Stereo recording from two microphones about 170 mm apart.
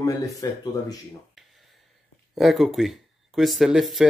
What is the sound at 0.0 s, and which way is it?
Speech, 20° left (ahead or behind).